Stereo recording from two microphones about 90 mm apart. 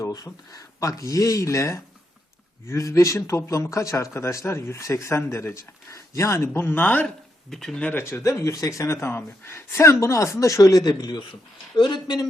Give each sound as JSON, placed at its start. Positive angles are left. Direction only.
{"t": 0.0, "sound": "speech", "side_deg": 40}
{"t": 7.5, "sound": "speech", "side_deg": 5}
{"t": 8.1, "sound": "speech", "side_deg": 35}